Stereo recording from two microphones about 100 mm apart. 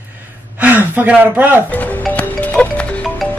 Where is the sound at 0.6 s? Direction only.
15° right (ahead or behind).